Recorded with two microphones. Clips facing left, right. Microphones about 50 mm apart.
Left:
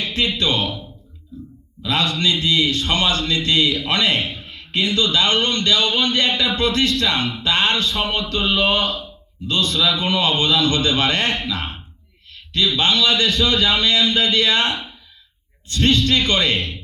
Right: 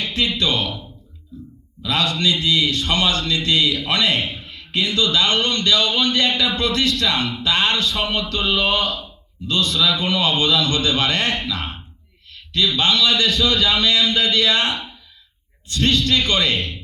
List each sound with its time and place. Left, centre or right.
0.3 s speech: left
1.8 s speech: left
6.3 s speech: left
6.6 s speech: left
12.5 s speech: left